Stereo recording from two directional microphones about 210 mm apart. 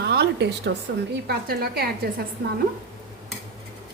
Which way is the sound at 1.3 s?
45° right (ahead or behind).